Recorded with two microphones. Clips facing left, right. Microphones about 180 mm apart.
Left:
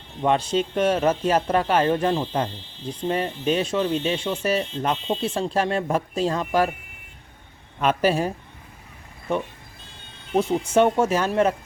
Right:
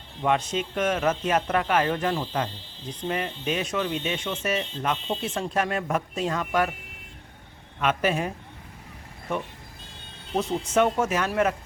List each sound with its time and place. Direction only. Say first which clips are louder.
0.2 s a man's voice: left 4 dB; 30° left (ahead or behind)
7.8 s a man's voice: left 4 dB; 35° left (ahead or behind)
9.3 s a man's voice: left 5 dB; 30° left (ahead or behind)
10.8 s a man's voice: left 4 dB; 30° left (ahead or behind)